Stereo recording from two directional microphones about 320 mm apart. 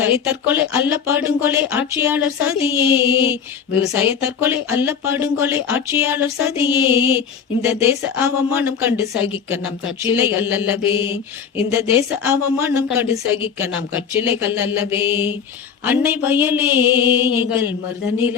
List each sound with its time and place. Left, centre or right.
0.0 s speech: centre
10.9 s mantra: centre
11.7 s speech: centre